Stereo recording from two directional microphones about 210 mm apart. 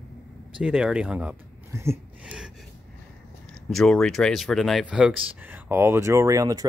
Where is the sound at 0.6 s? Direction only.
5° right (ahead or behind).